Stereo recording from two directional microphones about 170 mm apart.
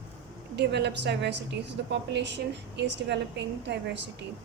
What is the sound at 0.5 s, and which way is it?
A woman's voice, 85° right.